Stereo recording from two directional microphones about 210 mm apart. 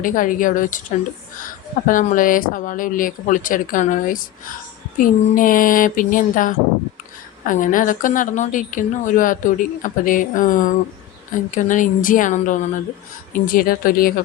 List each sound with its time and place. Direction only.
0.0 s a woman's voice: 40° left (ahead or behind)